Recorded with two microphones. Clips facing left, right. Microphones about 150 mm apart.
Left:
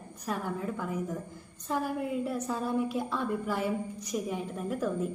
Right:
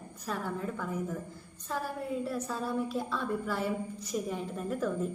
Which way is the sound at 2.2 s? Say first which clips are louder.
Left 2 dB; 15° left (ahead or behind).